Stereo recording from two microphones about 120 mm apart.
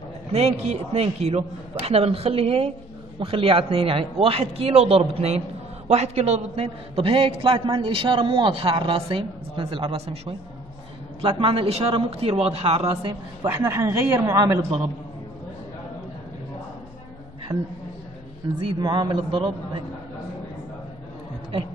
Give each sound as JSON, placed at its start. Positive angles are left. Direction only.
{"t": 0.3, "sound": "a man's voice", "side_deg": -60}
{"t": 11.1, "sound": "a man's voice", "side_deg": -50}
{"t": 13.6, "sound": "a woman's voice", "side_deg": -20}
{"t": 18.4, "sound": "a man's voice", "side_deg": -40}